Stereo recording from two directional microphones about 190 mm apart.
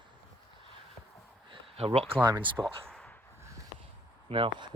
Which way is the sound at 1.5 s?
30° right (ahead or behind).